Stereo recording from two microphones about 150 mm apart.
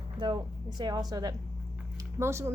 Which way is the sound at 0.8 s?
25° right (ahead or behind).